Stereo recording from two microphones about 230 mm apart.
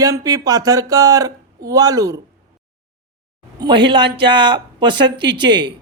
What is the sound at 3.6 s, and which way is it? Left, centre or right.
Speech, centre.